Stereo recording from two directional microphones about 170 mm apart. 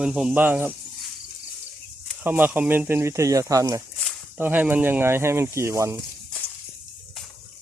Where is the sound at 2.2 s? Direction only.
10° right (ahead or behind).